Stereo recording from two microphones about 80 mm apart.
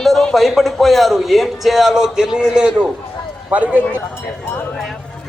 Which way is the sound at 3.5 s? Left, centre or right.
Right.